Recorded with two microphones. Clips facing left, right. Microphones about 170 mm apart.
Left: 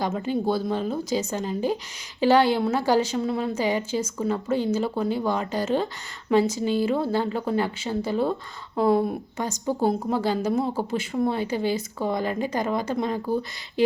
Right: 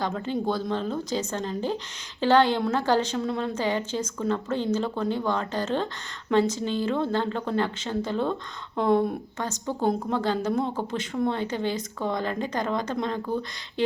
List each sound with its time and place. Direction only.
0.0 s speech: 10° left (ahead or behind)